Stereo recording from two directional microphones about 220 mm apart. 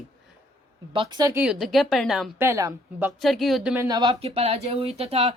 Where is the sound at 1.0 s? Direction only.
20° right (ahead or behind); by 2.5 s centre (ahead or behind).